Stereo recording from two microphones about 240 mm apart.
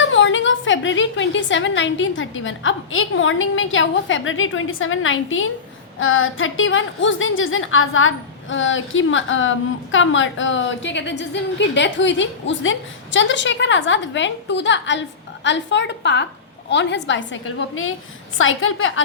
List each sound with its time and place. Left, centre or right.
0.0 s a woman's voice: left